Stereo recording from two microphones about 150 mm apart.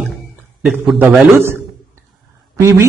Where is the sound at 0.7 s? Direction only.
5° right (ahead or behind).